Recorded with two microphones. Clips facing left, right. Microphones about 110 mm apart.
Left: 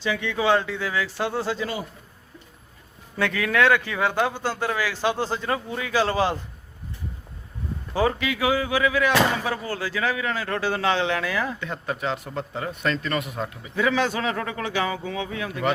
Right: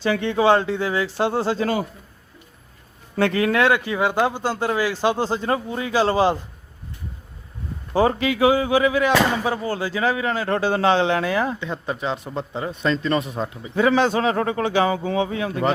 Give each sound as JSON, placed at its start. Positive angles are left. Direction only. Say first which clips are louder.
{"t": 0.0, "sound": "speech", "louder": "right 5 dB", "side_deg": -40}
{"t": 3.2, "sound": "speech", "louder": "right 5 dB", "side_deg": -35}
{"t": 3.6, "sound": "speech", "louder": "left 2 dB", "side_deg": -20}
{"t": 5.2, "sound": "speech", "louder": "right 4 dB", "side_deg": -30}
{"t": 7.9, "sound": "speech", "louder": "right 5 dB", "side_deg": -35}